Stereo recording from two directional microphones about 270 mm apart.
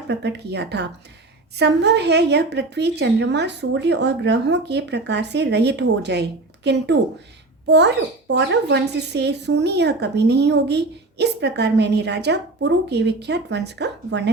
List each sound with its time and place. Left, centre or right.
0.1 s speech: right